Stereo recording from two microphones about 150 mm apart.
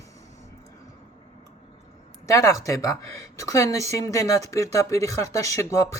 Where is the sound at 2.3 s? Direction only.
20° left (ahead or behind).